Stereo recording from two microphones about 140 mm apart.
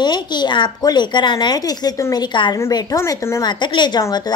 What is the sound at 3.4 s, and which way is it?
Speech, 35° left (ahead or behind).